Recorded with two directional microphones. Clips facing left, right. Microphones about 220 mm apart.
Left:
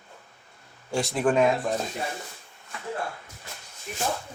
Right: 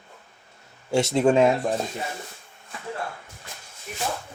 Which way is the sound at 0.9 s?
25° right (ahead or behind).